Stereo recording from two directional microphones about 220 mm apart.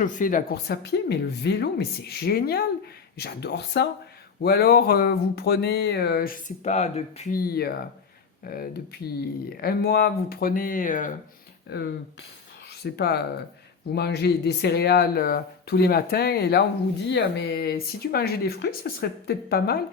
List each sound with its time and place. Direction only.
0.0 s speech: 35° left (ahead or behind)
11.7 s speech: 50° left (ahead or behind)